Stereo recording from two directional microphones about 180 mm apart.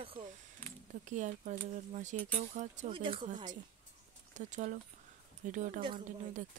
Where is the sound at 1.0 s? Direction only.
45° right (ahead or behind).